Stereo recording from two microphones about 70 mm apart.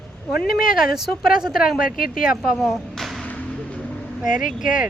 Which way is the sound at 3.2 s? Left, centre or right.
Left.